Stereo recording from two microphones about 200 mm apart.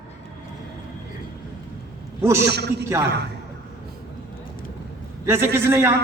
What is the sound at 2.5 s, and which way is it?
Speech, 55° right (ahead or behind).